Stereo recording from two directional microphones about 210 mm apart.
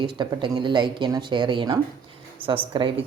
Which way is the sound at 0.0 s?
20° right (ahead or behind).